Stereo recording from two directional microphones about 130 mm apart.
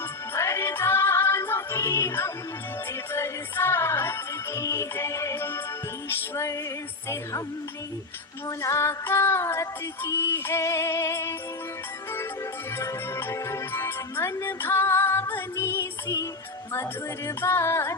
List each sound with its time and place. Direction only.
0.3 s music: 20° left (ahead or behind)
8.4 s music: 25° left (ahead or behind)
12.8 s music: 20° left (ahead or behind)
17.2 s music: 20° left (ahead or behind)